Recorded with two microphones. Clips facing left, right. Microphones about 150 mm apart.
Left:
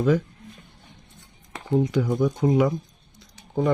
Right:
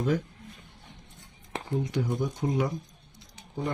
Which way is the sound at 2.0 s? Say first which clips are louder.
Left 8 dB; 90° left.